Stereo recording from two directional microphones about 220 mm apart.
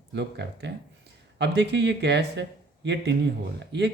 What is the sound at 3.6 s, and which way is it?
Speech, 50° right (ahead or behind).